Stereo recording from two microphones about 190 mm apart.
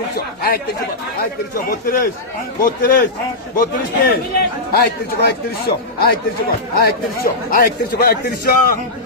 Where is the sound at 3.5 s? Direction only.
50° left (ahead or behind).